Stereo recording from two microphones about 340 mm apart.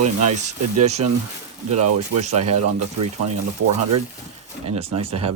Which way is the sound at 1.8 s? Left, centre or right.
Right.